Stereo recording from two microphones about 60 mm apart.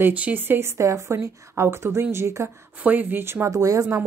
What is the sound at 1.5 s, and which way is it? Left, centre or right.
Speech, right.